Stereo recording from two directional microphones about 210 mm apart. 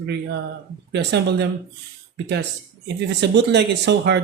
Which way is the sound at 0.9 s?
55° right (ahead or behind).